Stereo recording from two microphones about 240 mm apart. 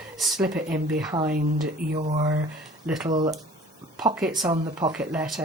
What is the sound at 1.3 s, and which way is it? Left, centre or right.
Speech, right.